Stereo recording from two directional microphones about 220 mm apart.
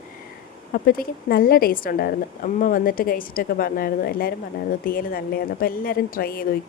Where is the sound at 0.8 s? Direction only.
40° left (ahead or behind).